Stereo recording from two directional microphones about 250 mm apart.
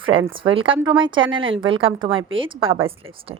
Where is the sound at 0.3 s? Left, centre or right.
Right.